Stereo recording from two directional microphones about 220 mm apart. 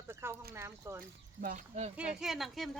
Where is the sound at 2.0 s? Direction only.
5° right (ahead or behind).